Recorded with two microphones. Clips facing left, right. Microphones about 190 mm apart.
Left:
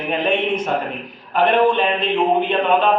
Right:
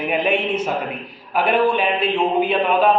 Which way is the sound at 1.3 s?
5° right (ahead or behind).